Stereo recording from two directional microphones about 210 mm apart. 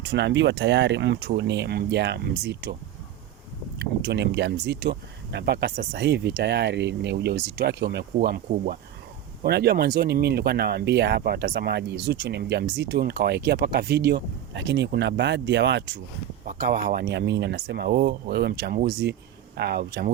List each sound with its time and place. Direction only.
0.0 s speech: 55° right (ahead or behind)
3.8 s speech: 55° right (ahead or behind)
16.5 s speech: 45° right (ahead or behind)